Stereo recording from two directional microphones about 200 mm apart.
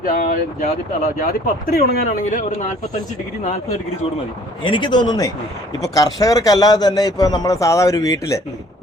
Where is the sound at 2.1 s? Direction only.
40° left (ahead or behind).